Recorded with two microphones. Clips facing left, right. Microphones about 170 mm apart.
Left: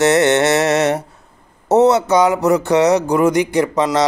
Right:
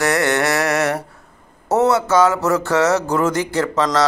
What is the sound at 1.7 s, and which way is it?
A man's voice, 20° left (ahead or behind).